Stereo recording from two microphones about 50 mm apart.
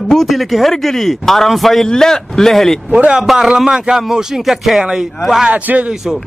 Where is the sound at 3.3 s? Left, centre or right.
Centre.